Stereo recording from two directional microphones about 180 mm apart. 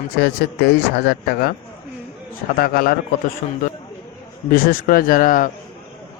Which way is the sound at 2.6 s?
55° left (ahead or behind).